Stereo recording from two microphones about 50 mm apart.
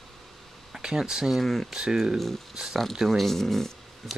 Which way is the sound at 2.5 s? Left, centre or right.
Centre.